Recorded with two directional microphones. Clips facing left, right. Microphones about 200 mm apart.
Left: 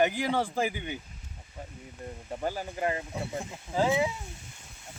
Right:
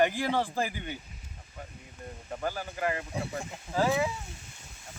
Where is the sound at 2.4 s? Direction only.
25° left (ahead or behind).